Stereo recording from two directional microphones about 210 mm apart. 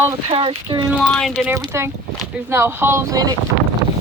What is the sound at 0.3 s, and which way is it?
Speech, 25° right (ahead or behind).